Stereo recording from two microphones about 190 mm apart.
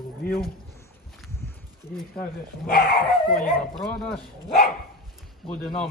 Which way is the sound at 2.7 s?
50° left (ahead or behind).